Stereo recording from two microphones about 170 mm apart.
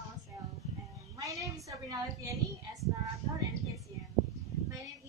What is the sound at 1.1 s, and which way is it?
A woman's voice, 20° right (ahead or behind).